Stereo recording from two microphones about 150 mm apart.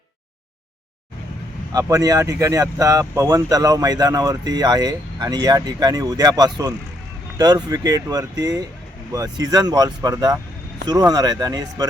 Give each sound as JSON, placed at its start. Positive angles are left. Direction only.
{"t": 1.7, "sound": "speech", "side_deg": -20}